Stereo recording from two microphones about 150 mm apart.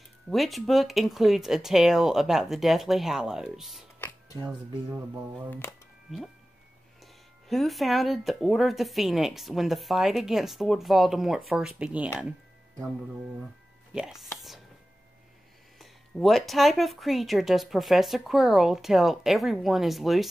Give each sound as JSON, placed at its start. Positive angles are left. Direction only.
{"t": 0.3, "sound": "speech", "side_deg": 0}
{"t": 5.5, "sound": "speech", "side_deg": 15}
{"t": 7.0, "sound": "speech", "side_deg": 0}
{"t": 13.9, "sound": "speech", "side_deg": -5}
{"t": 15.8, "sound": "speech", "side_deg": 0}